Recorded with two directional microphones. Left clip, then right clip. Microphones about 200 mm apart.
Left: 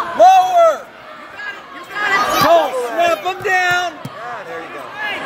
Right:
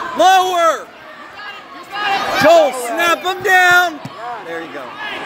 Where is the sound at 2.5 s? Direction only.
55° right (ahead or behind).